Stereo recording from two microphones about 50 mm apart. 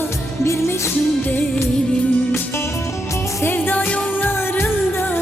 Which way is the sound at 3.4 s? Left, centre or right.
Left.